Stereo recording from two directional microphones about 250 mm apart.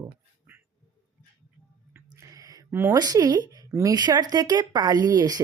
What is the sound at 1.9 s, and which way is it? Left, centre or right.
Speech, centre.